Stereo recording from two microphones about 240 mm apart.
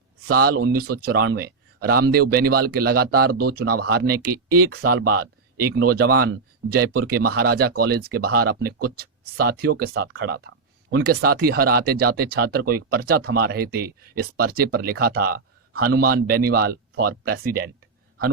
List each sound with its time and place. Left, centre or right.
0.3 s speech: right